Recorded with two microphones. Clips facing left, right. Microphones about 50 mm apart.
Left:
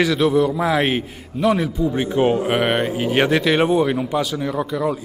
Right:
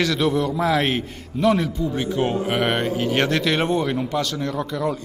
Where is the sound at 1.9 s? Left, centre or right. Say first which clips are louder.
Left 5 dB; centre.